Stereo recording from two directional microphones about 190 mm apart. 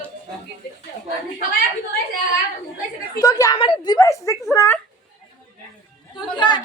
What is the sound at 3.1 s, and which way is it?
A woman's voice, 20° left (ahead or behind).